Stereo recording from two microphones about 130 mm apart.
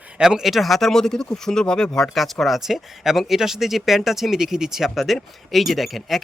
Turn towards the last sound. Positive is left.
turn(degrees=0)  # may be behind; listen again after turning